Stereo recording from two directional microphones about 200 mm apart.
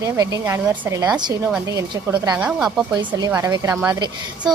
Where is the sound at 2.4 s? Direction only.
5° right (ahead or behind).